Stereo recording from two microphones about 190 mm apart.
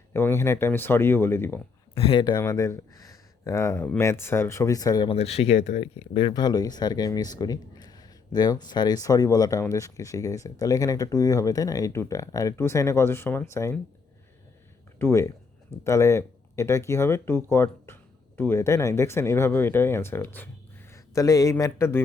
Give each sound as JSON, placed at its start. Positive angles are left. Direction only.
{"t": 0.1, "sound": "speech", "side_deg": 15}
{"t": 2.0, "sound": "speech", "side_deg": 25}
{"t": 5.1, "sound": "speech", "side_deg": 30}
{"t": 14.9, "sound": "speech", "side_deg": 15}